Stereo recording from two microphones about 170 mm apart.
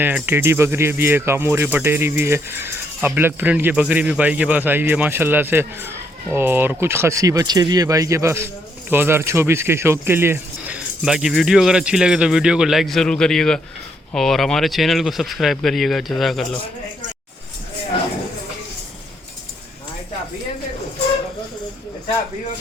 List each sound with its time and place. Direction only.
0.0 s speech: 10° right (ahead or behind)